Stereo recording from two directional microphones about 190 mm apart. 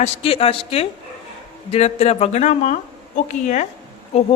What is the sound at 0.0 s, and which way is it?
A woman's voice, 30° left (ahead or behind).